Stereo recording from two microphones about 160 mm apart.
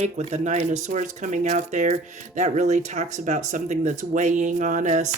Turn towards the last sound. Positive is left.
turn(degrees=-50)  # may be behind; listen again after turning